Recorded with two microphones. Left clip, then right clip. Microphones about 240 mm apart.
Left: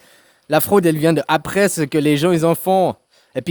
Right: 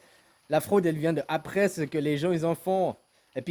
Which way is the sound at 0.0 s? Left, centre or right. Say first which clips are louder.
Left 9 dB; left.